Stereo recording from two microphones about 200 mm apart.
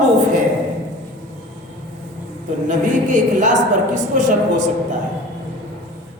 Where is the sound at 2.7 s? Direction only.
40° right (ahead or behind).